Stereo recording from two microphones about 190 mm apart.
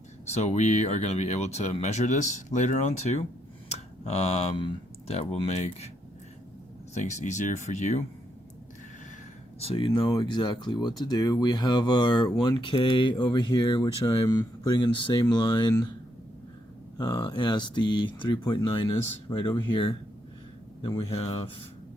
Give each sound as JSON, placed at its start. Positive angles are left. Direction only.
{"t": 0.3, "sound": "speech", "side_deg": 35}
{"t": 6.9, "sound": "speech", "side_deg": 40}
{"t": 9.6, "sound": "speech", "side_deg": 30}
{"t": 17.0, "sound": "speech", "side_deg": 20}